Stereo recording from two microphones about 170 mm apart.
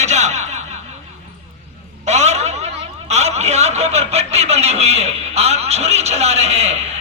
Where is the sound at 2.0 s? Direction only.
40° right (ahead or behind).